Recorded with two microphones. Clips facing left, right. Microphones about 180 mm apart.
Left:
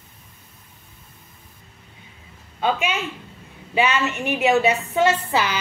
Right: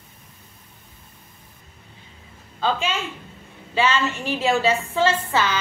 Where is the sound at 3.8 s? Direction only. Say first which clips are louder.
Left 1 dB; 15° left (ahead or behind).